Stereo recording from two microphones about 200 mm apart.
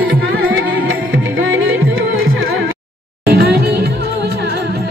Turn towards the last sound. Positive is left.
turn(degrees=-50)  # may be behind; listen again after turning